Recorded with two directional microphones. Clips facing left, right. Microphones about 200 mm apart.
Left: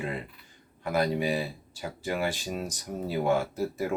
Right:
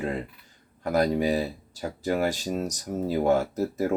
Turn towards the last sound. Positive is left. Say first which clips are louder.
# right 3 dB
turn(degrees=-40)  # may be behind; listen again after turning